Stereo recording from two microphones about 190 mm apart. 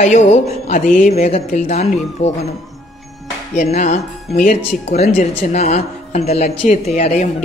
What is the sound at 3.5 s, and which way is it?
A woman's voice, 35° left (ahead or behind).